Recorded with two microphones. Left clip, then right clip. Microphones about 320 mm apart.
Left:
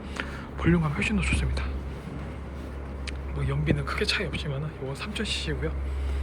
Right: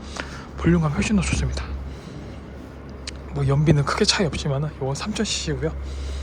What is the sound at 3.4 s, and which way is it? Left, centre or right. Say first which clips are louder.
Speech: right 8 dB; centre.